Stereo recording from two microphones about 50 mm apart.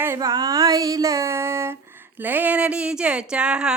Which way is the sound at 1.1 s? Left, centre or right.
Right.